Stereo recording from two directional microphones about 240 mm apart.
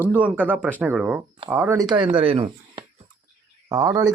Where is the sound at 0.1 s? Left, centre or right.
Centre.